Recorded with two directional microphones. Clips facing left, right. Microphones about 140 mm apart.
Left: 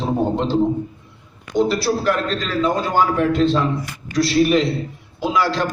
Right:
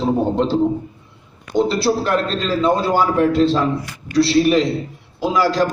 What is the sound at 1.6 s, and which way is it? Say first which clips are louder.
A man's voice: right 1 dB; 25° right (ahead or behind).